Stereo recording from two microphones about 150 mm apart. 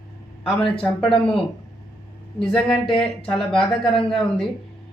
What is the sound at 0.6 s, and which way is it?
Speech, 35° left (ahead or behind).